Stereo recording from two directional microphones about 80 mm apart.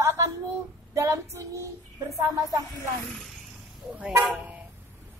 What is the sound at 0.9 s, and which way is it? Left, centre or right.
Child singing, right.